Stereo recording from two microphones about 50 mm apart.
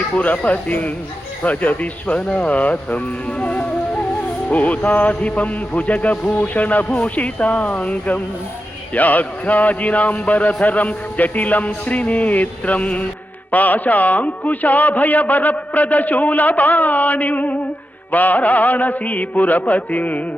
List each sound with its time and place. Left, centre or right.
0.1 s a man's voice: left